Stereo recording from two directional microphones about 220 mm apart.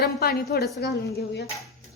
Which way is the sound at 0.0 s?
40° left (ahead or behind).